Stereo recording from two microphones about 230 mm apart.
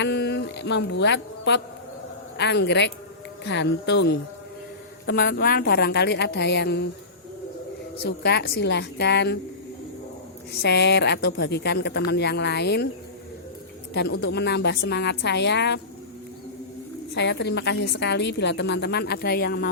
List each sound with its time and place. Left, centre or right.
0.0 s mantra: left
2.4 s a woman's voice: left
8.0 s a woman's voice: left
10.5 s a woman's voice: left
13.9 s a woman's voice: left
17.2 s a woman's voice: left